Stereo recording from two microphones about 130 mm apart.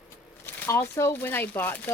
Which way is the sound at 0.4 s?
20° left (ahead or behind).